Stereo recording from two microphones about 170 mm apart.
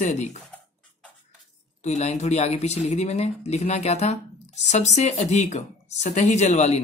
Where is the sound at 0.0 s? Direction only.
45° left (ahead or behind).